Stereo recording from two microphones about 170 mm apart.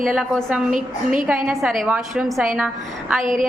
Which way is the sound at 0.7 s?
50° right (ahead or behind).